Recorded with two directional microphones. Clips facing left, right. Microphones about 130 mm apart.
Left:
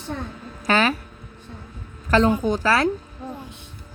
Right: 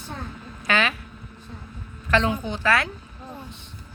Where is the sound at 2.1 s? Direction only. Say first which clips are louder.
Left 5 dB; 40° left (ahead or behind).